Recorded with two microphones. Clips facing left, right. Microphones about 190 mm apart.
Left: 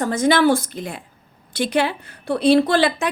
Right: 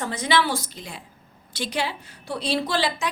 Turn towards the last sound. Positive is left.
turn(degrees=55)  # may be behind; listen again after turning